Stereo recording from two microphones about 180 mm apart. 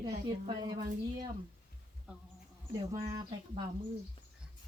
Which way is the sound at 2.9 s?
20° right (ahead or behind).